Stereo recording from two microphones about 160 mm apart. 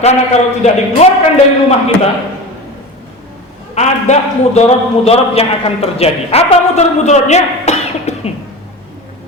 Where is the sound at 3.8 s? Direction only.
45° left (ahead or behind).